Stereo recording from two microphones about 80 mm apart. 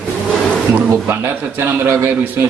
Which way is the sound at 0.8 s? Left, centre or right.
Right.